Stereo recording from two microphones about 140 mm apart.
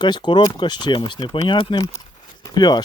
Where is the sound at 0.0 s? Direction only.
30° left (ahead or behind).